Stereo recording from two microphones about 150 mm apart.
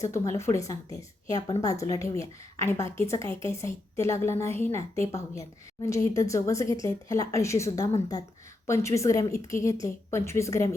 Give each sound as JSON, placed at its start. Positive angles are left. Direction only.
{"t": 0.0, "sound": "a woman's voice", "side_deg": 20}